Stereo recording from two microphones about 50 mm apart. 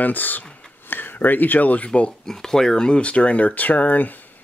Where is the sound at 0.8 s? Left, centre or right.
Left.